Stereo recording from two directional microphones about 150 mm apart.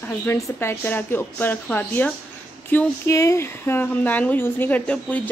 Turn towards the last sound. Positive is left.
turn(degrees=10)  # may be behind; listen again after turning